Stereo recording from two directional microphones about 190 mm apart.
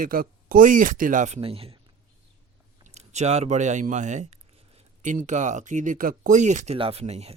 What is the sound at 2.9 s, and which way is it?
A man's voice, 35° right (ahead or behind).